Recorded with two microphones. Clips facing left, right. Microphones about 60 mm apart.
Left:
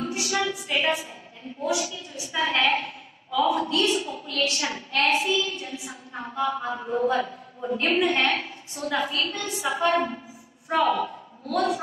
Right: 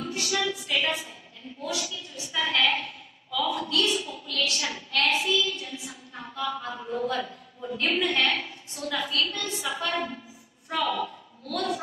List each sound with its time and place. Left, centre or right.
0.1 s music: centre
1.6 s a sound: left
8.0 s a woman's voice: centre